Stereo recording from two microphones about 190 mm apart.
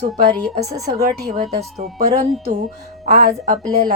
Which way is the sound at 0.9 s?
40° right (ahead or behind).